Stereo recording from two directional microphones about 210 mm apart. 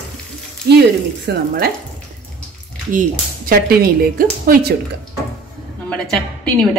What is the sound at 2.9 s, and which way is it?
Speech, 40° right (ahead or behind).